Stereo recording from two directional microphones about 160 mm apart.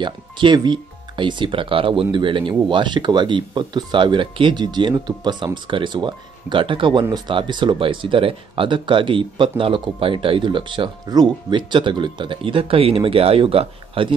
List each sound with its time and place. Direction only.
0.0 s speech: 30° right (ahead or behind)